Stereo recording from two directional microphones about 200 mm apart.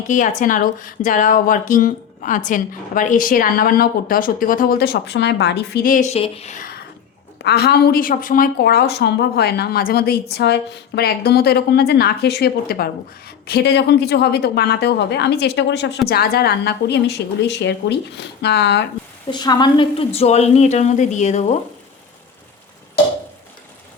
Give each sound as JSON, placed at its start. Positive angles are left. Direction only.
{"t": 0.1, "sound": "speech", "side_deg": 40}
{"t": 7.4, "sound": "a woman's voice", "side_deg": 55}
{"t": 19.3, "sound": "speech", "side_deg": 20}